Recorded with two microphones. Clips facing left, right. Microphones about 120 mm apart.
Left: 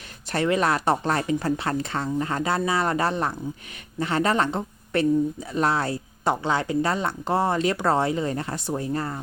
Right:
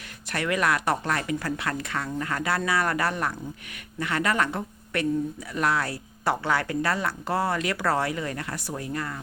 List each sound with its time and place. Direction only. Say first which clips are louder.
0.3 s speech: left 3 dB; 30° left (ahead or behind)